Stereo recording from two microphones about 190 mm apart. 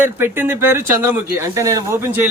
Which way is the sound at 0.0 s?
10° right (ahead or behind).